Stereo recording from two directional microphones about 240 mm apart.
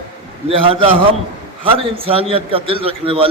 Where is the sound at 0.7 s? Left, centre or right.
Right.